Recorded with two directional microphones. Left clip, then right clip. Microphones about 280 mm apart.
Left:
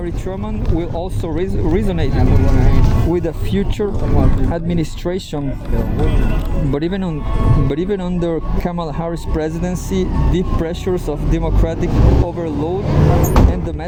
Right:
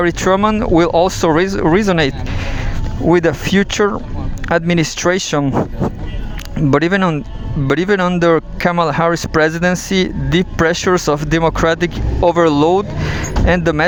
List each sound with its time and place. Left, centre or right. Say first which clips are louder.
0.0 s speech: right 13 dB; right
6.7 s speech: right 9 dB; right